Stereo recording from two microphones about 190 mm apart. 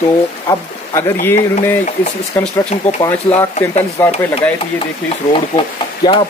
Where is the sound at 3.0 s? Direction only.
15° left (ahead or behind).